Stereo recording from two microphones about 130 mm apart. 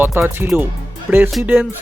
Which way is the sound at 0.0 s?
20° right (ahead or behind).